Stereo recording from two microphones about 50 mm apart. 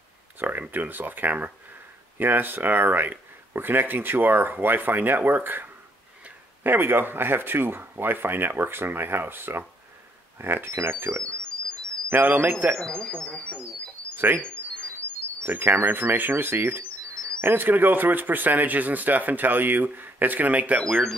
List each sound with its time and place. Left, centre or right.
0.4 s speech: right
12.1 s speech: right
12.7 s speech: centre
14.1 s a sound: right
15.4 s speech: right